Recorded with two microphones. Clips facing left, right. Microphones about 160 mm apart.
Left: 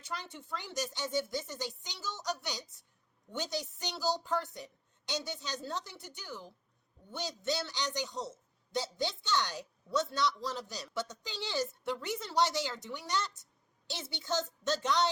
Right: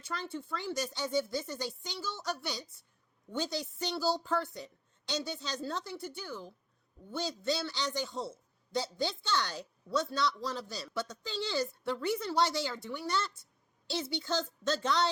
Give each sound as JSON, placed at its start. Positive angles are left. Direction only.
{"t": 0.0, "sound": "a man's voice", "side_deg": 15}